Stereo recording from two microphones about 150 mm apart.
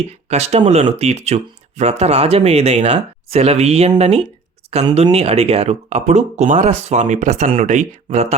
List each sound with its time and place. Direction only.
0.3 s speech: 45° right (ahead or behind)